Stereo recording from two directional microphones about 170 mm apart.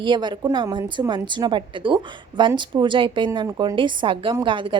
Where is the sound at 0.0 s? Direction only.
25° right (ahead or behind).